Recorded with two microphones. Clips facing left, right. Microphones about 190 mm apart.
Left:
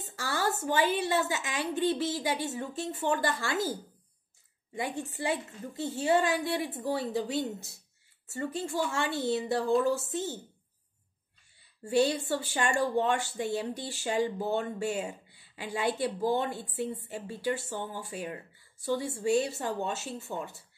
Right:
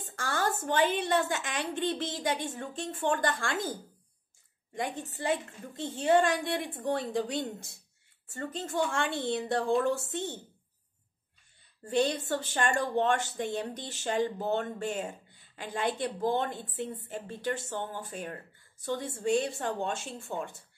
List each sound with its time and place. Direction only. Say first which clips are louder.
0.1 s a woman's voice: even; 5° left (ahead or behind)
4.7 s a woman's voice: left 1 dB; 5° left (ahead or behind)
11.8 s a woman's voice: left 2 dB; 10° left (ahead or behind)